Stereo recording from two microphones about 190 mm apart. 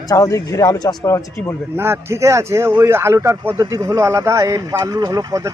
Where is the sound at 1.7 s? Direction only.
10° right (ahead or behind).